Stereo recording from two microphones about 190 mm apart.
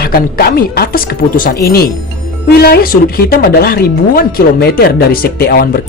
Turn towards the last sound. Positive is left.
turn(degrees=55)  # may be behind; listen again after turning